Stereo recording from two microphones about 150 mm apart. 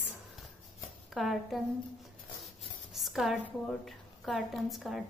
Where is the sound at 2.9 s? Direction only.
Centre (ahead or behind).